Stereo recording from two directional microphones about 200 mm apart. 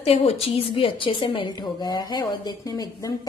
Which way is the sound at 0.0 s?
30° left (ahead or behind).